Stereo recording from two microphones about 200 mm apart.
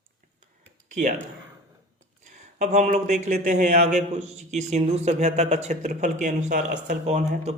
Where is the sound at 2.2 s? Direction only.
35° right (ahead or behind).